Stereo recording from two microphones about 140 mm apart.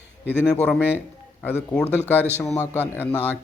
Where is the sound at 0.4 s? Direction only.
5° left (ahead or behind).